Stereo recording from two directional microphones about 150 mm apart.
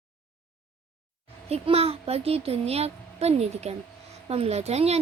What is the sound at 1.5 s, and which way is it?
A woman's voice, 40° right (ahead or behind).